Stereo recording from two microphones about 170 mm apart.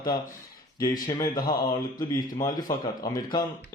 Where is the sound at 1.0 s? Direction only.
25° left (ahead or behind).